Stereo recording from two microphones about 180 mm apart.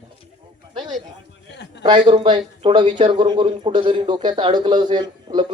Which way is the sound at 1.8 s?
25° right (ahead or behind).